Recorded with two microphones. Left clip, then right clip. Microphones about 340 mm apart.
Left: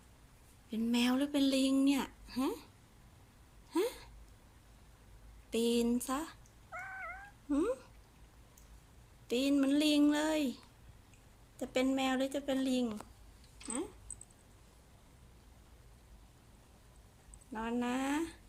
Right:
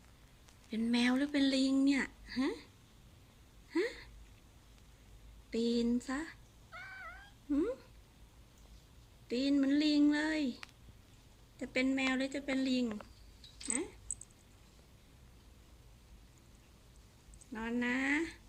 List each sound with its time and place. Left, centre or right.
0.7 s speech: centre
3.7 s a sound: centre
5.5 s cat: centre
7.5 s speech: centre
9.2 s speech: centre
17.5 s speech: centre